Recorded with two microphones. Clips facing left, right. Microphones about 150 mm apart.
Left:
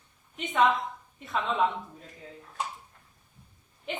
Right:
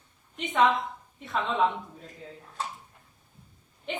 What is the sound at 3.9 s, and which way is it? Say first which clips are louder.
Speech: right 1 dB; centre (ahead or behind).